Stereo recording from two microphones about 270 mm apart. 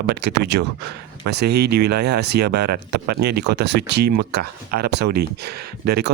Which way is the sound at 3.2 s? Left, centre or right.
Right.